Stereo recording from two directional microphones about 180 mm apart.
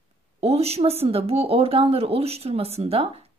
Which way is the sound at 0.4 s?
35° right (ahead or behind).